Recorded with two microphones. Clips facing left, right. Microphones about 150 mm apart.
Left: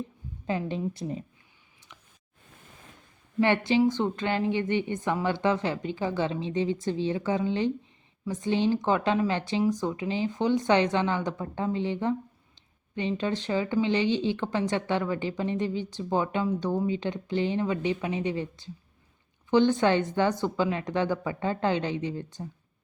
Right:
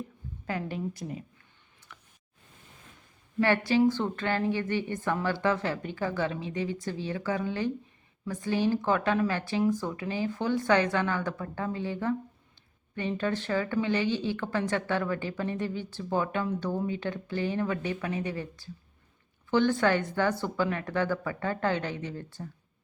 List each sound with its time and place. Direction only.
0.4 s a woman's voice: 20° left (ahead or behind)
1.9 s a sound: 15° left (ahead or behind)
3.4 s a woman's voice: 20° left (ahead or behind)